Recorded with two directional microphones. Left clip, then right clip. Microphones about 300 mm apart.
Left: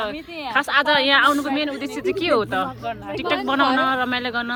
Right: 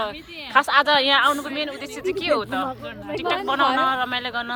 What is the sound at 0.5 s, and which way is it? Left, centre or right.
Speech, centre.